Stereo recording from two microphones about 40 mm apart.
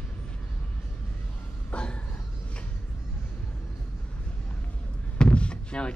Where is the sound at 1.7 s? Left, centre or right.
Left.